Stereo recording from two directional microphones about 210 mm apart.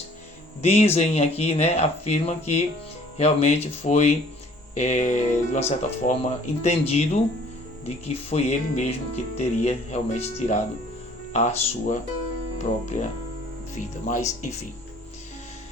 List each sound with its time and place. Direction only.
0.6 s speech: 30° left (ahead or behind)